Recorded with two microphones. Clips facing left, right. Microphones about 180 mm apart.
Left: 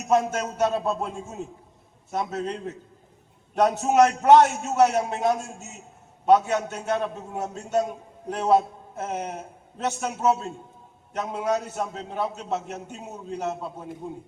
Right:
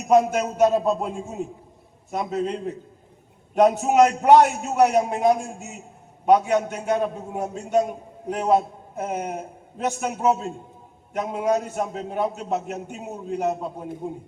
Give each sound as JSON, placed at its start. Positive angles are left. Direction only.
{"t": 0.1, "sound": "a man's voice", "side_deg": -10}